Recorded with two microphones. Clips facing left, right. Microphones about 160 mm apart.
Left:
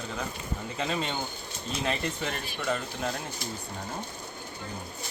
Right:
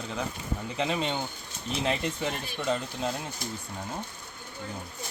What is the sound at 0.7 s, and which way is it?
Speech, 20° right (ahead or behind).